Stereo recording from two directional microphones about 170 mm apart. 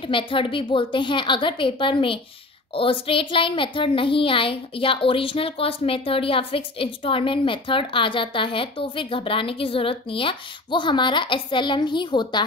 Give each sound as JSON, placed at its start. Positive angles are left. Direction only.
{"t": 0.0, "sound": "a woman's voice", "side_deg": 30}